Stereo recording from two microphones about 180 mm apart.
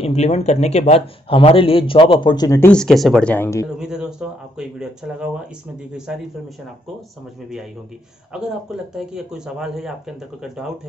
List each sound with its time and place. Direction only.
0.0 s a man's voice: 35° left (ahead or behind); by 2.7 s 20° left (ahead or behind)
2.7 s a man's voice: centre (ahead or behind)
3.7 s a man's voice: 5° right (ahead or behind)
8.3 s a man's voice: 5° right (ahead or behind)